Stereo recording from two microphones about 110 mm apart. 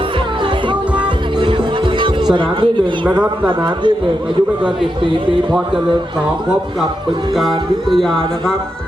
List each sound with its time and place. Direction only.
0.7 s music: 45° right (ahead or behind)
3.2 s a man's voice: 45° right (ahead or behind)
7.3 s music: centre (ahead or behind)